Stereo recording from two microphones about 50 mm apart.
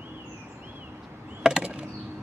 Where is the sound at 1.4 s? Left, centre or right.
Centre.